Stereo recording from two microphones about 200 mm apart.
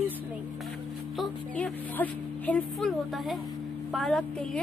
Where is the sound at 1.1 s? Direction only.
5° left (ahead or behind).